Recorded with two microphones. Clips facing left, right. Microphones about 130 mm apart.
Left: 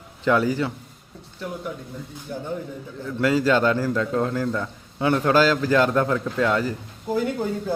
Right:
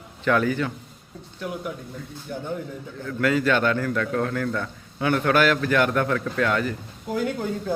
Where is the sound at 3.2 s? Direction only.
25° left (ahead or behind).